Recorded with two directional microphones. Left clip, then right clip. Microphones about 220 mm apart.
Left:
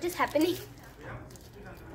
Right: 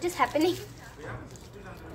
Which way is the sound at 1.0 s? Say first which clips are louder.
Right 3 dB; 45° right (ahead or behind).